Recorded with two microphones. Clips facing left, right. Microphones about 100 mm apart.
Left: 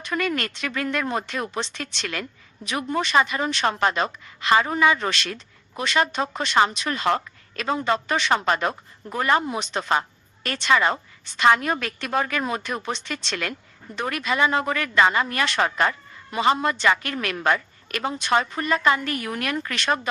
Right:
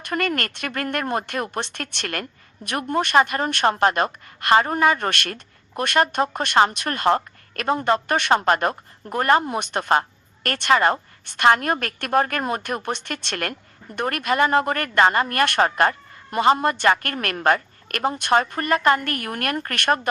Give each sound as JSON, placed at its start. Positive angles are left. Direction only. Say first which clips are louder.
{"t": 0.0, "sound": "a woman's voice", "louder": "right 1 dB", "side_deg": -55}
{"t": 9.5, "sound": "a woman's voice", "louder": "right 3 dB", "side_deg": -55}